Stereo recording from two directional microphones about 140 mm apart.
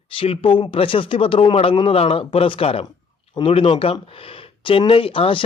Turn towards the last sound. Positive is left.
turn(degrees=40)  # may be behind; listen again after turning